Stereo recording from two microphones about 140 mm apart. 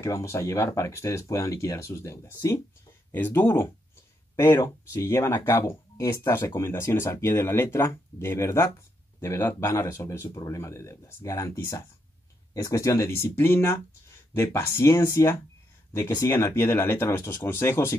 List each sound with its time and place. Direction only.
0.0 s speech: 20° left (ahead or behind)